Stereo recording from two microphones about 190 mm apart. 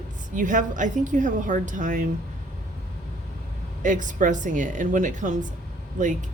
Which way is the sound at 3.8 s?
40° right (ahead or behind).